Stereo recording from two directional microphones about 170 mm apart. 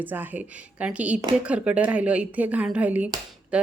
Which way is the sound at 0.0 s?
10° right (ahead or behind).